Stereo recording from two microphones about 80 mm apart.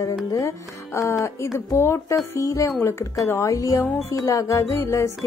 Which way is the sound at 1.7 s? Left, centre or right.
Left.